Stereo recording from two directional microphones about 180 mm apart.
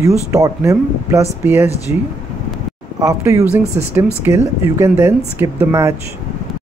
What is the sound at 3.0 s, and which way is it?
Speech, 15° right (ahead or behind).